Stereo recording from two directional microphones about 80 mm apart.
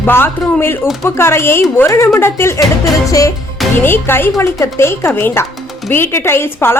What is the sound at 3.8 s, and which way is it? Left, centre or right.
A woman's voice, left.